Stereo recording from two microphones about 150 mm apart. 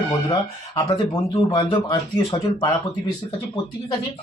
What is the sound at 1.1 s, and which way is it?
Speech, 30° left (ahead or behind).